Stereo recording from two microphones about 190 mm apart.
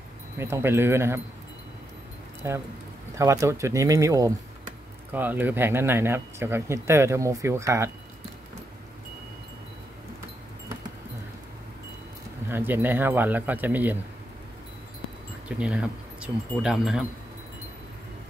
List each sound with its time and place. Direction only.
0.4 s speech: 15° right (ahead or behind)
2.4 s speech: 15° right (ahead or behind)
12.4 s speech: 10° right (ahead or behind)
15.4 s speech: 5° right (ahead or behind)